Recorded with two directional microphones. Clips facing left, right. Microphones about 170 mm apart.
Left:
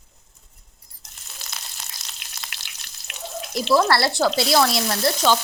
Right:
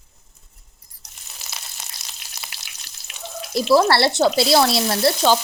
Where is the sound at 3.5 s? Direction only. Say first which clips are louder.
Right 3 dB; 35° right (ahead or behind).